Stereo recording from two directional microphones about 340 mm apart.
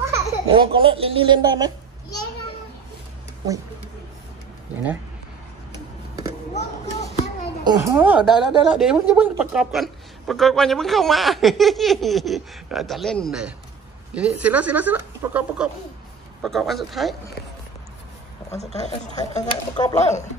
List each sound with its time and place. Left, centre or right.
0.0 s a child's voice: centre
7.6 s a woman's voice: centre
18.5 s a woman's voice: centre